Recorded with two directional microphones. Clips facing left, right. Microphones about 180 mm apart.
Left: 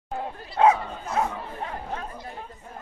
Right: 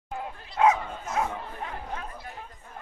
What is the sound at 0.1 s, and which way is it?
Dog, 30° left (ahead or behind).